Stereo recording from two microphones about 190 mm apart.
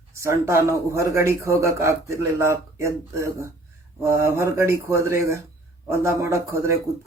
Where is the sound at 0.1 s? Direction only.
15° right (ahead or behind).